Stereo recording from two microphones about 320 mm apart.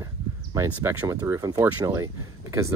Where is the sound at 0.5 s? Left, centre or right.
Centre.